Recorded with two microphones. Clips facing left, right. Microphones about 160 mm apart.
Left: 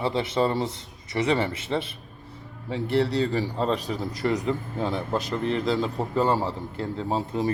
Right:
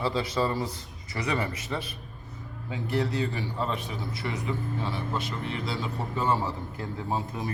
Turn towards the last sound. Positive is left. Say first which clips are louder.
# left 5 dB
turn(degrees=30)  # may be behind; listen again after turning